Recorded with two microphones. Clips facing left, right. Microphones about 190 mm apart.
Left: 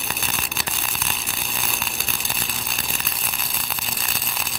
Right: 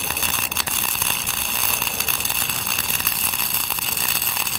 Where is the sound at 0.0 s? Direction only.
Centre (ahead or behind).